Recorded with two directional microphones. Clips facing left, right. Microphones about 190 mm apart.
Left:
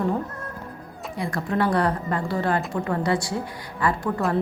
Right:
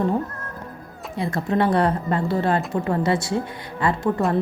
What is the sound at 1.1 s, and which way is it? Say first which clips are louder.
Speech: right 3 dB; 25° right (ahead or behind).